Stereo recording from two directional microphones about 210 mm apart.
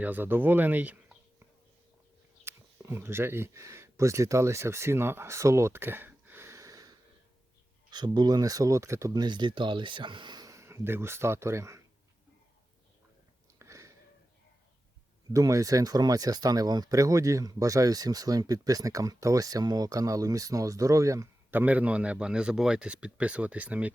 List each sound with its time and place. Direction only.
0.0 s speech: 10° right (ahead or behind)
2.4 s speech: 10° right (ahead or behind)
13.6 s a sound: 15° right (ahead or behind)
15.3 s speech: 15° right (ahead or behind)